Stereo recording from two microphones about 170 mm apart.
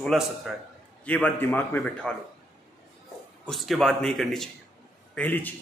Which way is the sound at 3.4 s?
Centre (ahead or behind).